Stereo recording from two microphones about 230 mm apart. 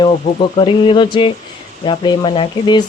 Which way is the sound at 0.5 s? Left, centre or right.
Left.